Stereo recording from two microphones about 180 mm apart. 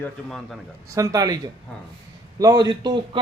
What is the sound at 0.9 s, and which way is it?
A man's voice, 20° right (ahead or behind).